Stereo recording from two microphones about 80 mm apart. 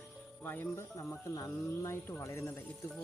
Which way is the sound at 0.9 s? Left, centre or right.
Left.